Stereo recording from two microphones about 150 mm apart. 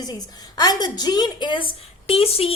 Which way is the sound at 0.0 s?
25° left (ahead or behind).